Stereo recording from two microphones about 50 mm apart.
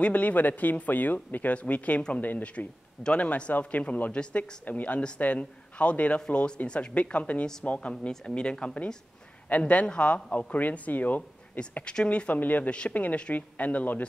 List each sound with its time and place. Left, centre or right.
0.0 s a man's voice: left
7.9 s a man's voice: centre
9.5 s a man's voice: left
11.8 s a man's voice: centre
12.4 s speech: left